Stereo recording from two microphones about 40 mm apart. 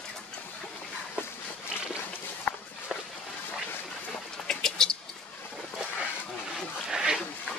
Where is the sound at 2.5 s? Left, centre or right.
Left.